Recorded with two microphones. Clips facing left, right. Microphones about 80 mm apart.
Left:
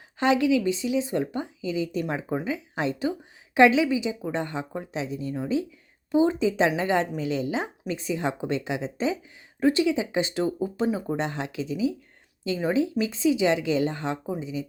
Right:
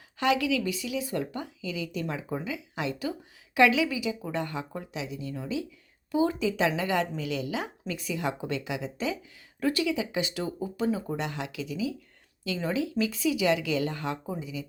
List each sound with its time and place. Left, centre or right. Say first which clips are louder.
0.2 s speech: left 4 dB; left